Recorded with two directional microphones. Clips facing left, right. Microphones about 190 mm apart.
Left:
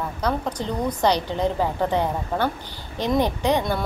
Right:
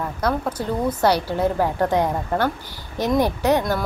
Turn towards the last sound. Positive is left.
turn(degrees=-5)  # may be behind; listen again after turning